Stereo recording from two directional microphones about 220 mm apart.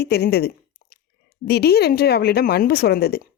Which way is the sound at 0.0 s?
45° left (ahead or behind).